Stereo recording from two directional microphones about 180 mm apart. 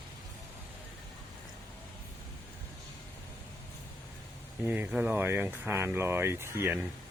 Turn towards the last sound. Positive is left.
turn(degrees=-10)  # may be behind; listen again after turning